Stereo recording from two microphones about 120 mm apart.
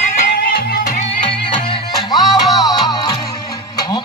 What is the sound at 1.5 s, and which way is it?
Music, 35° left (ahead or behind).